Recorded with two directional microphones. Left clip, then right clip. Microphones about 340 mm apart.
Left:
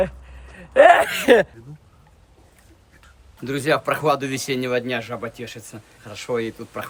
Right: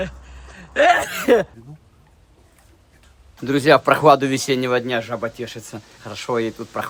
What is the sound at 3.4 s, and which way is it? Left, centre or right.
Speech, centre.